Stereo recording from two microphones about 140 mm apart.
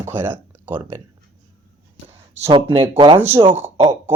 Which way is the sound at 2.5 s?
35° right (ahead or behind).